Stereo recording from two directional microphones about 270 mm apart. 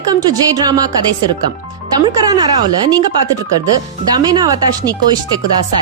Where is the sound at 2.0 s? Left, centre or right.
Centre.